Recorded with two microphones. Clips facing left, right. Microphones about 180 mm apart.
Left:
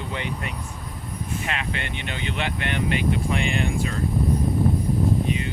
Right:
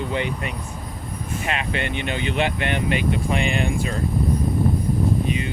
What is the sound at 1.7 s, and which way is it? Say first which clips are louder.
Speech: right 6 dB; 15° right (ahead or behind).